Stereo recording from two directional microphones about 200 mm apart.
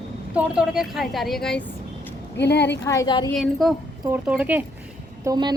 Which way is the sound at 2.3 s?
55° left (ahead or behind).